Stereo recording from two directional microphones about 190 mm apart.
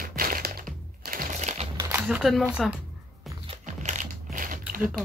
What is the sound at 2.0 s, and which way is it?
Speech, centre (ahead or behind).